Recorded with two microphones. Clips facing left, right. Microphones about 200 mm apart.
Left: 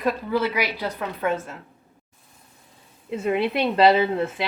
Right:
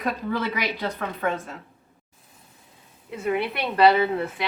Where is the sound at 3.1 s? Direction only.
25° left (ahead or behind).